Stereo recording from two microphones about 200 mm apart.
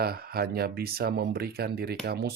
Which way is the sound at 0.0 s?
50° right (ahead or behind).